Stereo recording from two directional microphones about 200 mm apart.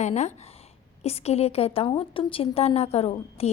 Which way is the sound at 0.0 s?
35° left (ahead or behind).